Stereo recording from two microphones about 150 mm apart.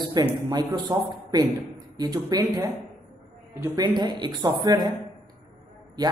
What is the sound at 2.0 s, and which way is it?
A woman's voice, 25° right (ahead or behind).